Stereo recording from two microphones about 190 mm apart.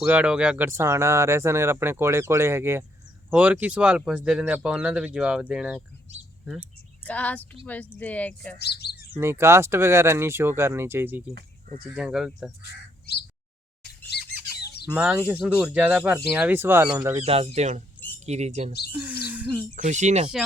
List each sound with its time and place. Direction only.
0.0 s speech: 10° right (ahead or behind)
7.0 s speech: 5° left (ahead or behind)
8.5 s speech: 60° left (ahead or behind)
9.1 s speech: 10° right (ahead or behind)
13.1 s a sound: 60° left (ahead or behind)
14.1 s squawk: 60° left (ahead or behind)
14.5 s chicken: 60° left (ahead or behind)
14.8 s speech: 5° right (ahead or behind)
17.2 s speech: 30° right (ahead or behind)
18.9 s speech: 10° right (ahead or behind)
19.7 s speech: 40° right (ahead or behind)